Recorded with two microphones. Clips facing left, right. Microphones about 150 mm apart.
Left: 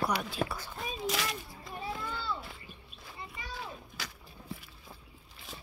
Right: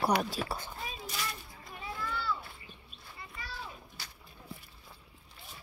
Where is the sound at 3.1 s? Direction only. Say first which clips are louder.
Left 2 dB; 20° left (ahead or behind).